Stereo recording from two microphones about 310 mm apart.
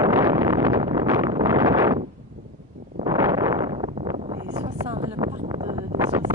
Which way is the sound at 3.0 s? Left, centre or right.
Centre.